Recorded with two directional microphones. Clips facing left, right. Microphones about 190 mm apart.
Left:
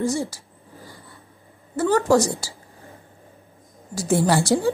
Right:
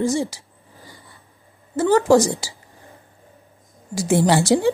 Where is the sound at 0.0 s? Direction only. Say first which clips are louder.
Right 3 dB; 20° right (ahead or behind).